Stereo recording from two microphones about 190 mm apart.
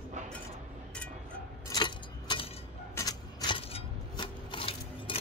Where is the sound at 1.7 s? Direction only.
25° left (ahead or behind).